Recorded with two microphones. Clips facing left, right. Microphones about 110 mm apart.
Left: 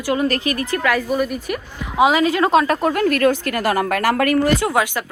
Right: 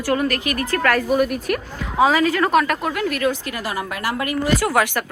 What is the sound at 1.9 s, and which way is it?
A woman's voice, 20° left (ahead or behind).